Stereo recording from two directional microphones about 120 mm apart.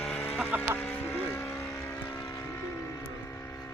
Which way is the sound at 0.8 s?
15° left (ahead or behind).